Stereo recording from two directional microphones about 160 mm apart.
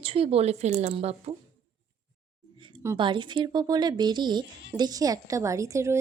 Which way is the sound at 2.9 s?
30° right (ahead or behind).